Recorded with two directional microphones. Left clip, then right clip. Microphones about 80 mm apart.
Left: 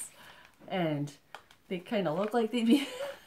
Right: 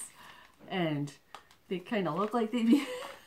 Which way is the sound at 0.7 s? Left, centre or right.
Left.